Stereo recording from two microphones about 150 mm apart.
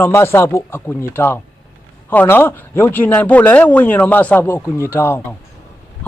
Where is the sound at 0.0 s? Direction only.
15° left (ahead or behind).